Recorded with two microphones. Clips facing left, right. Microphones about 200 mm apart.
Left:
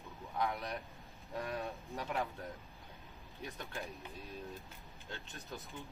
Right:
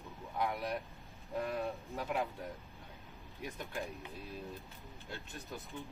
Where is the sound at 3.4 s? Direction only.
15° right (ahead or behind).